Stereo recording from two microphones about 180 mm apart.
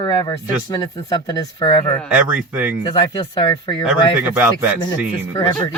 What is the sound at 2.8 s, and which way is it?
Speech, 25° left (ahead or behind).